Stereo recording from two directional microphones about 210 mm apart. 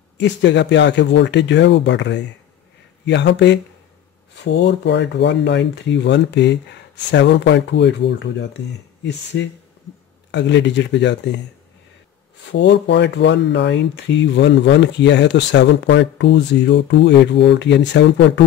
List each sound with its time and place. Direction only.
0.2 s speech: 55° left (ahead or behind)
12.4 s speech: 55° left (ahead or behind)